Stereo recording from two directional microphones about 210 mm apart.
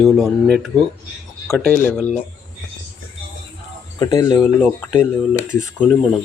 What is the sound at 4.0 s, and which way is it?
Speech, 20° left (ahead or behind).